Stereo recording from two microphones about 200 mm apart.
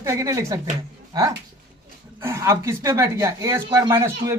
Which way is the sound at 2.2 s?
15° right (ahead or behind).